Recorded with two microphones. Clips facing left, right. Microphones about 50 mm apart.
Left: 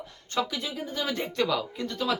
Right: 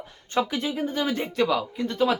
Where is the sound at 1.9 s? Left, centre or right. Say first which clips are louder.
Right 7 dB; right.